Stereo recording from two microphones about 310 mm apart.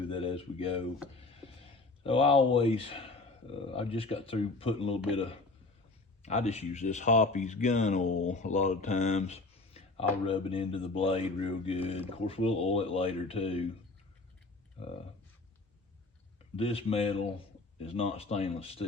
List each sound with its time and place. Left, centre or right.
0.1 s speech: centre
1.2 s a sound: centre
2.0 s speech: centre
16.6 s speech: centre